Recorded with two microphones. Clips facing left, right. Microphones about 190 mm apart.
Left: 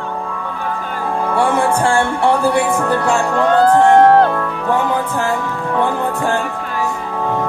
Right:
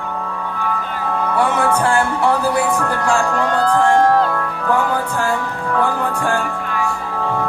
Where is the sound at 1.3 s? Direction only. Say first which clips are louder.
Left 2 dB; 30° left (ahead or behind).